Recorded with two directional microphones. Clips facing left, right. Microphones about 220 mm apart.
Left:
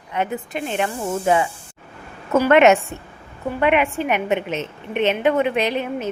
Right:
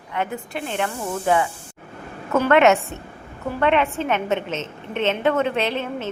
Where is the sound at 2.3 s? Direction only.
20° left (ahead or behind).